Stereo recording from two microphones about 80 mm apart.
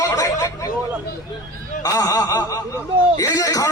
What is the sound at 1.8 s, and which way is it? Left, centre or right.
A man's voice, left.